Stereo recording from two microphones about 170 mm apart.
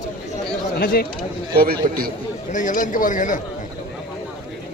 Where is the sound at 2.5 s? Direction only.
50° left (ahead or behind).